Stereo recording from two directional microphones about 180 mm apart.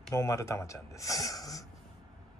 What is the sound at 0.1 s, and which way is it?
Speech, 15° left (ahead or behind).